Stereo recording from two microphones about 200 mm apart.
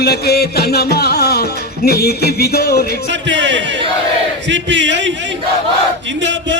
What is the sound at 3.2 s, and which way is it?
Speech, 60° right (ahead or behind).